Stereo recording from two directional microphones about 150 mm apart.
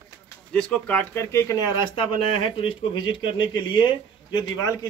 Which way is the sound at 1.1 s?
20° left (ahead or behind).